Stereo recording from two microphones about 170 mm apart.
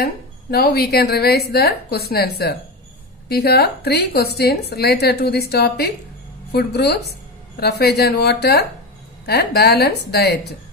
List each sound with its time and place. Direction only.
0.0 s a woman's voice: 70° left (ahead or behind)